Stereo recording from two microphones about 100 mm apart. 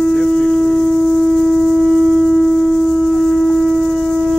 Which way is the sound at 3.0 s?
Centre (ahead or behind).